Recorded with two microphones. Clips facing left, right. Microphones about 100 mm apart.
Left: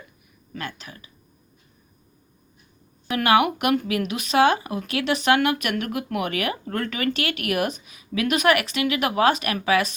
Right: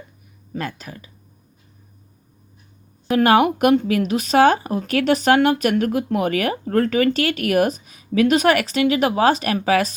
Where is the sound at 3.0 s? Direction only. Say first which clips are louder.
Right 4 dB; 40° right (ahead or behind).